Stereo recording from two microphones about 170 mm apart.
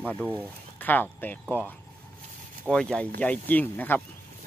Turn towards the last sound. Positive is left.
turn(degrees=10)  # may be behind; listen again after turning